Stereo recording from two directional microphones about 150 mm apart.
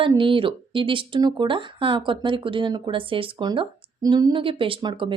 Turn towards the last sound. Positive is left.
turn(degrees=-35)  # may be behind; listen again after turning